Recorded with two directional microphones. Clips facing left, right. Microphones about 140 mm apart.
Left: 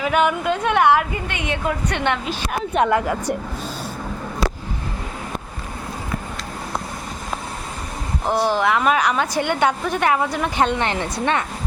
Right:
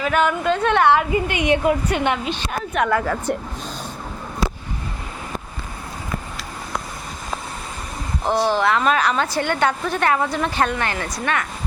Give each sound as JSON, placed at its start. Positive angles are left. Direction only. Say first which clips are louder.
{"t": 0.0, "sound": "a woman's voice", "louder": "even", "side_deg": 15}
{"t": 1.3, "sound": "a woman's voice", "louder": "right 6 dB", "side_deg": -15}
{"t": 2.0, "sound": "a woman's voice", "louder": "right 1 dB", "side_deg": -5}
{"t": 2.7, "sound": "a woman's voice", "louder": "left 2 dB", "side_deg": 25}
{"t": 3.3, "sound": "a woman's voice", "louder": "even", "side_deg": 10}
{"t": 8.3, "sound": "a woman's voice", "louder": "even", "side_deg": 10}